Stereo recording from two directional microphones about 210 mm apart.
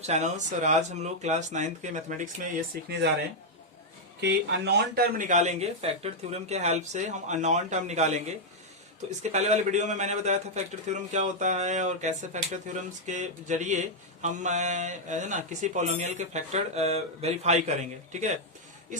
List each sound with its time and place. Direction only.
0.0 s a man's voice: 35° right (ahead or behind)
4.2 s a man's voice: 55° right (ahead or behind); by 18.3 s 35° right (ahead or behind)